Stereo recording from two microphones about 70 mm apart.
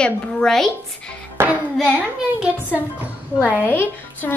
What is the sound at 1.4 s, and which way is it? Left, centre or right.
Hands, right.